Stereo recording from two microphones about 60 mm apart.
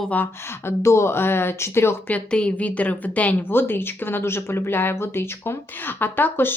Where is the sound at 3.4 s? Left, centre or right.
Left.